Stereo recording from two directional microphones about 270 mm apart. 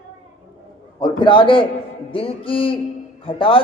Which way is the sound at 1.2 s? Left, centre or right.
Centre.